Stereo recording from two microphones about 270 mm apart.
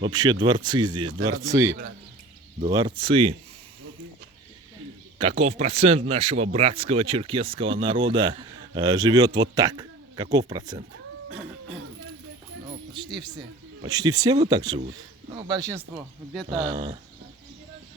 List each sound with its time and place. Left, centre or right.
0.0 s speech: centre
2.6 s speech: centre
5.4 s speech: right
13.8 s speech: centre
16.3 s speech: centre
16.6 s speech: centre